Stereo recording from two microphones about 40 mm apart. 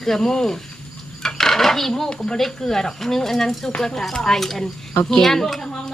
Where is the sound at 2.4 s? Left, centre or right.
Centre.